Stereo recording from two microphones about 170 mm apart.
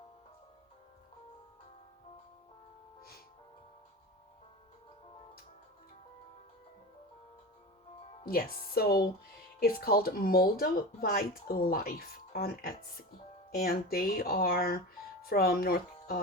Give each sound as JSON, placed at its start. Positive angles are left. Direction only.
{"t": 8.2, "sound": "speech", "side_deg": 60}